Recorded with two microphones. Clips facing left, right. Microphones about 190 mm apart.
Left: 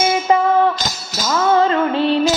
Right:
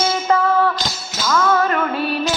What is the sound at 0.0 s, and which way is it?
Music, 15° left (ahead or behind).